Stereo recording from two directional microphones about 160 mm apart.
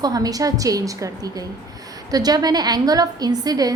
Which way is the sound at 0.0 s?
25° right (ahead or behind).